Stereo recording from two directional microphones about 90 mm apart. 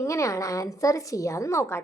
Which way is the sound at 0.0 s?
35° left (ahead or behind).